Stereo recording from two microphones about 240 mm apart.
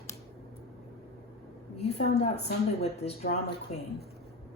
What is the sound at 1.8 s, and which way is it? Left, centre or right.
A woman's voice, left.